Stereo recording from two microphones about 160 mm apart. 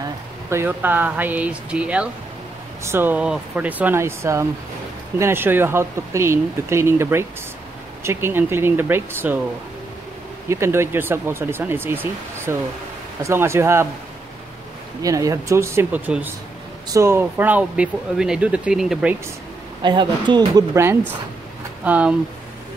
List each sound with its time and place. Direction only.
0.5 s speech: 15° right (ahead or behind)
10.5 s speech: 15° right (ahead or behind)
15.0 s speech: 20° right (ahead or behind); by 19.1 s 5° right (ahead or behind)
19.8 s speech: 30° right (ahead or behind); by 22.1 s 10° right (ahead or behind)